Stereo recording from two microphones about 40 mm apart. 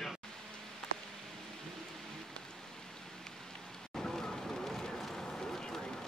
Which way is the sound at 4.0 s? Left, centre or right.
Centre.